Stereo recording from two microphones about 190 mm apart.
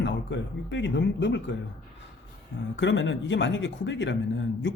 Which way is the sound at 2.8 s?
70° left (ahead or behind).